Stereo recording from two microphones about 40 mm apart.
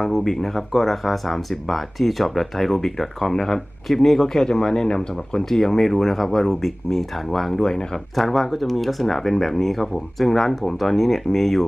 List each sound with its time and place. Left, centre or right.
0.0 s speech: centre
5.5 s speech: centre